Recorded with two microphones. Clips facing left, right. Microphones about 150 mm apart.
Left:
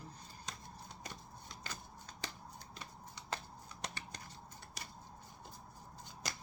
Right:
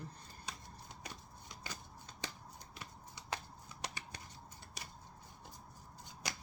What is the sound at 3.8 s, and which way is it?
Scissors, 10° right (ahead or behind).